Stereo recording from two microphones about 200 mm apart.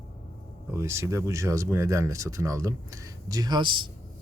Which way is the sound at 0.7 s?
15° right (ahead or behind).